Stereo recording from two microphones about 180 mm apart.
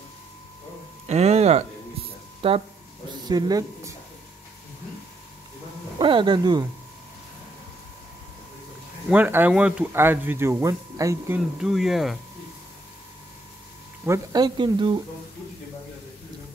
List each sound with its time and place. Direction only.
1.0 s music: 35° right (ahead or behind)
2.4 s speech: 30° right (ahead or behind)
3.3 s speech: 20° right (ahead or behind)
5.9 s speech: 25° right (ahead or behind)
9.1 s speech: 10° right (ahead or behind)
14.0 s speech: 20° right (ahead or behind)